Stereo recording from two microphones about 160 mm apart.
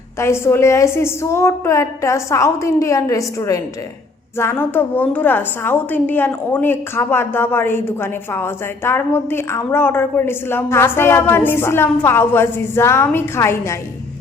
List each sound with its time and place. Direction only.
0.2 s a woman's voice: 15° left (ahead or behind)